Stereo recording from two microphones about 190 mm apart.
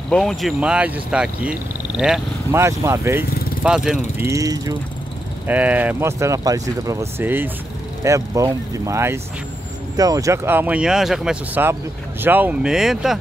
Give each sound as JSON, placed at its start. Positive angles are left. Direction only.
{"t": 0.1, "sound": "speech", "side_deg": 0}
{"t": 2.5, "sound": "speech", "side_deg": -15}
{"t": 4.3, "sound": "speech", "side_deg": -20}